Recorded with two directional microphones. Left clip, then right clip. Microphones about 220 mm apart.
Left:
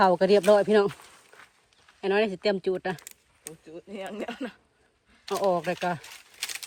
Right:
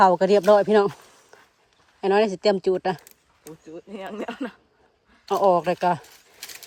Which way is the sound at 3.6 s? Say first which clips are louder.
Right 2 dB; 50° right (ahead or behind).